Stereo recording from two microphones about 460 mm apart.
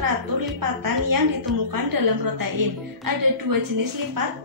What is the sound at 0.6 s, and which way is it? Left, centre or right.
Speech, right.